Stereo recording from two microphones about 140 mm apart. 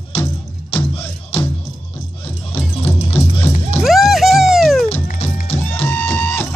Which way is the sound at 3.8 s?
Centre (ahead or behind).